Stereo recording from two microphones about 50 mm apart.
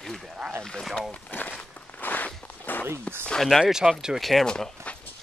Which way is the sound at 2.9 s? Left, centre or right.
Right.